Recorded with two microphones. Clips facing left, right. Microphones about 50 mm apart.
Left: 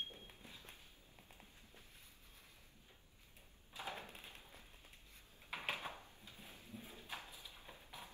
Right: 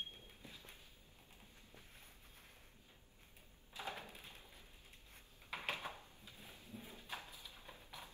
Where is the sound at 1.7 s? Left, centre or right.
Right.